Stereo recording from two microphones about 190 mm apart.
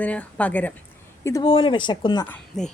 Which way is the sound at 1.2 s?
20° left (ahead or behind).